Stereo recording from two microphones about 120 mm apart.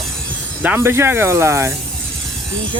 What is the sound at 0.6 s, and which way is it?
Speech, 15° right (ahead or behind).